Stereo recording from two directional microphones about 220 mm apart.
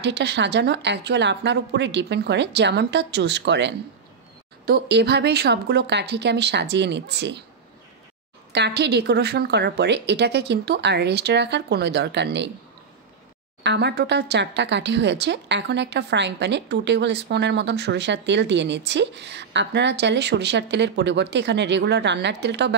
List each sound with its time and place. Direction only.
0.0 s speech: 50° right (ahead or behind)
8.5 s speech: 50° right (ahead or behind)
13.6 s speech: 50° right (ahead or behind)